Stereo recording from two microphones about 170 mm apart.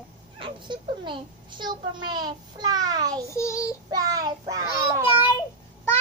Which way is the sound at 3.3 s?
15° left (ahead or behind).